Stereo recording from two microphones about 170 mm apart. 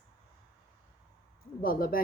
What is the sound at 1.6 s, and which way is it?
Speech, 60° left (ahead or behind).